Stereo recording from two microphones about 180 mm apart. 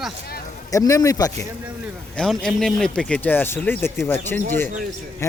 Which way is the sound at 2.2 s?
5° left (ahead or behind).